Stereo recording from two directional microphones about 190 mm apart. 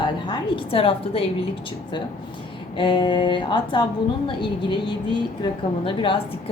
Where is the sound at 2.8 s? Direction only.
25° left (ahead or behind).